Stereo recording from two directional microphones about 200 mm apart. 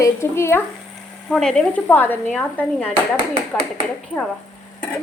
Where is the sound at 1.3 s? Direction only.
5° left (ahead or behind).